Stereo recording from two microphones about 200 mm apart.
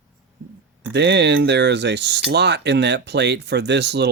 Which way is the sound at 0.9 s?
60° right (ahead or behind).